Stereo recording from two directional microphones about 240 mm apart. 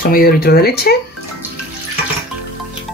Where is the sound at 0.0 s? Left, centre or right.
Left.